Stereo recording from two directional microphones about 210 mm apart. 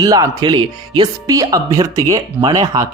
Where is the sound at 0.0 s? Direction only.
15° right (ahead or behind).